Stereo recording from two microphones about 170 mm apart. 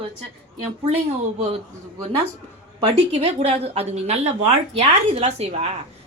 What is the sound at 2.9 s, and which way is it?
Speech, 35° right (ahead or behind).